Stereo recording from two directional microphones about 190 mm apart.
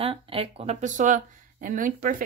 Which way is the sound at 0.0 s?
30° right (ahead or behind).